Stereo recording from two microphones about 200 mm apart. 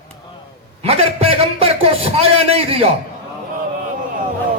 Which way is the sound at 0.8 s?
30° right (ahead or behind).